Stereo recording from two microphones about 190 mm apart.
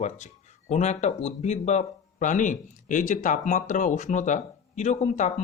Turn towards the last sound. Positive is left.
turn(degrees=40)  # may be behind; listen again after turning